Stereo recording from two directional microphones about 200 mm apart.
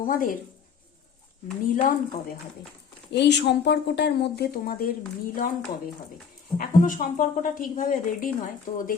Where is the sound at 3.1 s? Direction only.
60° left (ahead or behind).